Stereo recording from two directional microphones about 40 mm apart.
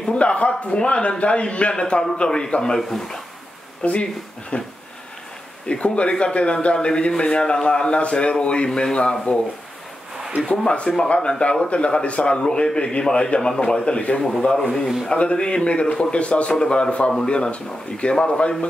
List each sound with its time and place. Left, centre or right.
0.1 s a man's voice: left; by 3.2 s centre
3.8 s a man's voice: left
5.7 s a man's voice: left
8.6 s speech: centre
9.3 s speech: left
10.5 s a man's voice: left
13.8 s a man's voice: left
14.4 s speech: centre
15.0 s a man's voice: left